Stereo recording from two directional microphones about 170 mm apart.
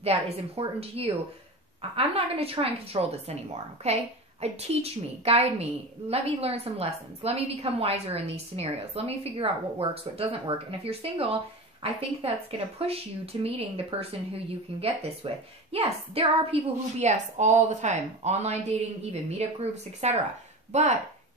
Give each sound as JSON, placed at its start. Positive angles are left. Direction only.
{"t": 0.0, "sound": "a woman's voice", "side_deg": -35}